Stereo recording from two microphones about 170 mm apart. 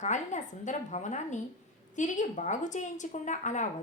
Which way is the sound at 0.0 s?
45° left (ahead or behind).